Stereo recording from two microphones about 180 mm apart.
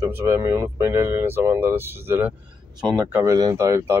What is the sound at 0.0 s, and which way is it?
Speech, 15° right (ahead or behind).